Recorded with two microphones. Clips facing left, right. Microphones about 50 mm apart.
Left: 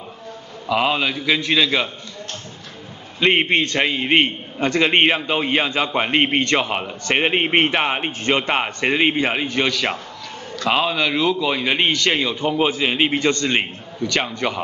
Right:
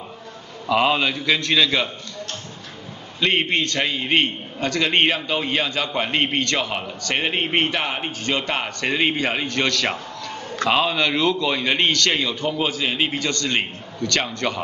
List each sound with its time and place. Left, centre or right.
0.7 s a man's voice: centre
3.2 s a man's voice: left